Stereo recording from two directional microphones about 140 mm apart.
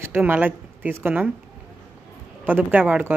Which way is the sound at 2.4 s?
10° right (ahead or behind).